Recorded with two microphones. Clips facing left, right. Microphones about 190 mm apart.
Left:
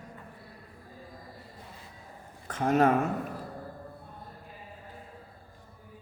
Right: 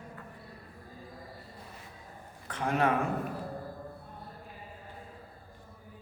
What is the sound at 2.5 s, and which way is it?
Speech, 45° left (ahead or behind).